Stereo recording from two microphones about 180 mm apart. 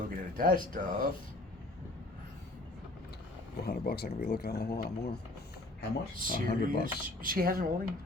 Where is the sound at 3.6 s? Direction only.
60° left (ahead or behind).